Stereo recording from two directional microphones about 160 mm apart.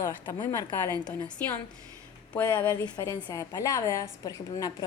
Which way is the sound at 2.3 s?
10° left (ahead or behind).